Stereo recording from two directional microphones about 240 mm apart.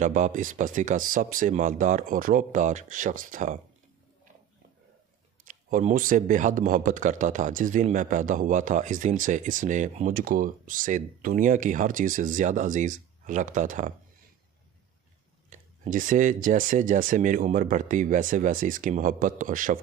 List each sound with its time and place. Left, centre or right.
0.0 s speech: right
5.4 s speech: right
15.5 s speech: right